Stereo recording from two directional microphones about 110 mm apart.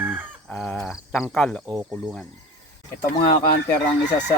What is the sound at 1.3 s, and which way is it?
Chicken, 10° left (ahead or behind).